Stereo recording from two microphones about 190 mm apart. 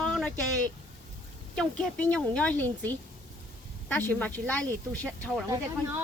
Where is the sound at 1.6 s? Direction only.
5° left (ahead or behind).